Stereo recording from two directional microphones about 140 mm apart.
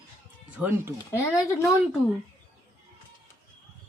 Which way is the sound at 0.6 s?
5° right (ahead or behind).